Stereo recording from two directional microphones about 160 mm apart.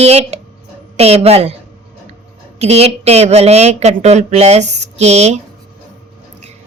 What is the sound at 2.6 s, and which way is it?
Speech, 40° right (ahead or behind).